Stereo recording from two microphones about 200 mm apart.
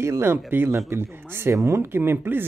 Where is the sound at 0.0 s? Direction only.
10° right (ahead or behind).